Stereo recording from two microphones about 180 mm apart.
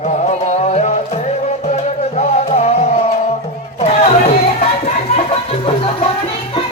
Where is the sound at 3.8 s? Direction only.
35° left (ahead or behind).